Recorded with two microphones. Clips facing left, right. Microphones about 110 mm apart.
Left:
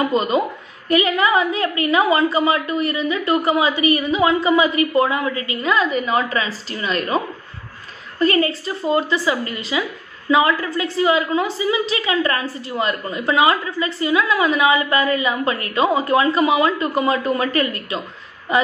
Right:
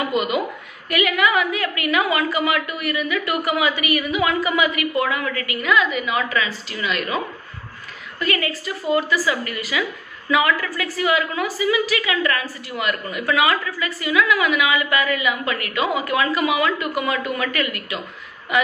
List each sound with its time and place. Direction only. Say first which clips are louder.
0.0 s a woman's voice: left 3 dB; 35° left (ahead or behind)
8.2 s a woman's voice: left 6 dB; 35° left (ahead or behind)